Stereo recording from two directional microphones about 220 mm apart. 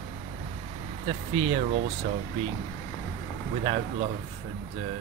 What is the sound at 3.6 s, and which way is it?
Speech, 30° right (ahead or behind).